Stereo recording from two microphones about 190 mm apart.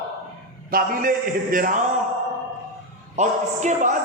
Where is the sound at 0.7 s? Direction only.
45° right (ahead or behind).